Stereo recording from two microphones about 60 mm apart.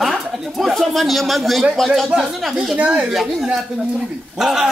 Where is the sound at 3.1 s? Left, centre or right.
Centre.